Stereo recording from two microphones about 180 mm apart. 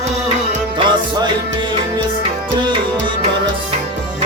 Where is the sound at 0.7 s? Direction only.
25° right (ahead or behind).